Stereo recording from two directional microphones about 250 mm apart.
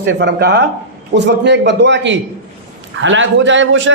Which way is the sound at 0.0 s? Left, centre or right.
Right.